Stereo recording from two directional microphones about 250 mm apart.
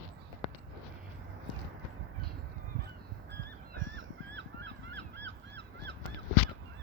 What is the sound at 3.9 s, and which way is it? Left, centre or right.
Honk, right.